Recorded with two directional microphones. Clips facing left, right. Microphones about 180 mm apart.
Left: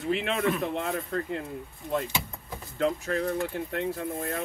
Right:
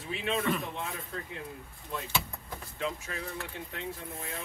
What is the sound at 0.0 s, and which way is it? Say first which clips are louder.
Speech: left 5 dB; 65° left (ahead or behind).